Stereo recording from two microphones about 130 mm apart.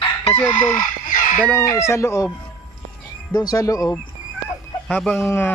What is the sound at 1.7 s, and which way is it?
Speech, 20° left (ahead or behind).